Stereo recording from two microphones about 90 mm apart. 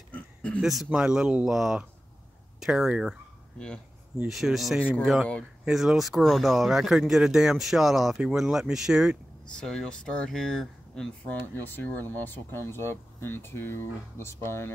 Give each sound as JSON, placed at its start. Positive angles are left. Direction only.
{"t": 0.1, "sound": "a sound", "side_deg": 15}
{"t": 0.6, "sound": "speech", "side_deg": -5}
{"t": 3.5, "sound": "speech", "side_deg": 10}
{"t": 4.3, "sound": "speech", "side_deg": 0}
{"t": 9.6, "sound": "speech", "side_deg": 5}
{"t": 11.5, "sound": "speech", "side_deg": 20}